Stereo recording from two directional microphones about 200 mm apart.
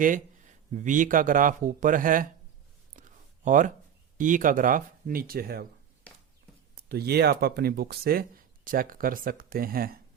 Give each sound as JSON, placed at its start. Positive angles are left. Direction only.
{"t": 0.0, "sound": "speech", "side_deg": -40}
{"t": 3.0, "sound": "a sound", "side_deg": -40}
{"t": 3.4, "sound": "speech", "side_deg": -40}
{"t": 6.7, "sound": "speech", "side_deg": -50}